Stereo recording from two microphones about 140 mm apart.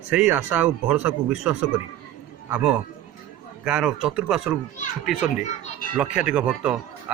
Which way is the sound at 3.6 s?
5° right (ahead or behind).